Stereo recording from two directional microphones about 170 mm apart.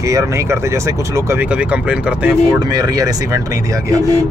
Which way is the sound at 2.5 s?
25° right (ahead or behind).